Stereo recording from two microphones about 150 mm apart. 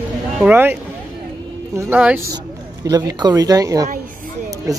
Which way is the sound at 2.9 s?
25° right (ahead or behind).